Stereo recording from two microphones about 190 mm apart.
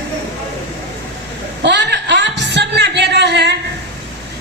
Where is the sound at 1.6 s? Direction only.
65° right (ahead or behind).